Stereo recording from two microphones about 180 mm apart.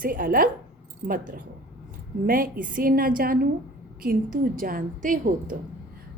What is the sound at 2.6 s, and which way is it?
A woman's voice, 50° right (ahead or behind).